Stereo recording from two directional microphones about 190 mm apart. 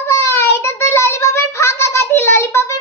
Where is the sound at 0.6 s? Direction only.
15° left (ahead or behind).